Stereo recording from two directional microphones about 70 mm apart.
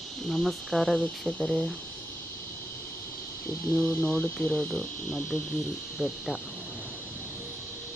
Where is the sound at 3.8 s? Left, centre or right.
Centre.